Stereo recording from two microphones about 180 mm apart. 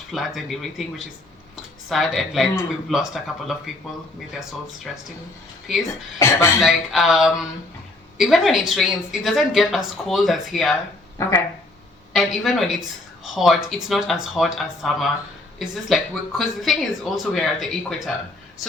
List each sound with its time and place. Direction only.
0.1 s speech: centre (ahead or behind)
6.1 s speech: 15° left (ahead or behind)
6.6 s speech: centre (ahead or behind)
11.2 s speech: 15° left (ahead or behind)
12.1 s speech: centre (ahead or behind)